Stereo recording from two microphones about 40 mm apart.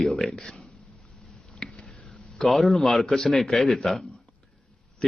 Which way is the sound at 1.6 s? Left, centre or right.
Centre.